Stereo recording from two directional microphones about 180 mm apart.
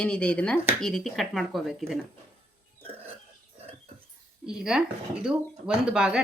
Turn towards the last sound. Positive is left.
turn(degrees=-5)  # may be behind; listen again after turning